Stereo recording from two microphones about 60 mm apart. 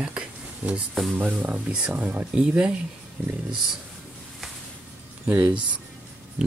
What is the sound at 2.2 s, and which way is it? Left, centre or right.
Speech, centre.